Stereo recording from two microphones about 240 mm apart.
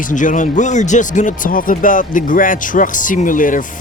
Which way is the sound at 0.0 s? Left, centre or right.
Left.